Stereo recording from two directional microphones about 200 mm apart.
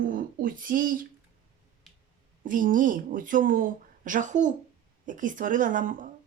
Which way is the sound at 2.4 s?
40° right (ahead or behind).